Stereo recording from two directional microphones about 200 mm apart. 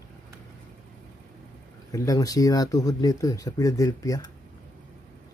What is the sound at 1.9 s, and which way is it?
Speech, 15° left (ahead or behind).